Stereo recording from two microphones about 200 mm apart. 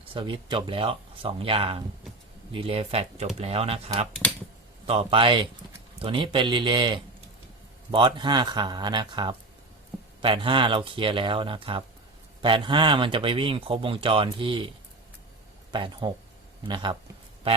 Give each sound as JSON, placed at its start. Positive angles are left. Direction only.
{"t": 0.0, "sound": "speech", "side_deg": -25}
{"t": 15.7, "sound": "speech", "side_deg": -25}
{"t": 17.5, "sound": "music", "side_deg": -30}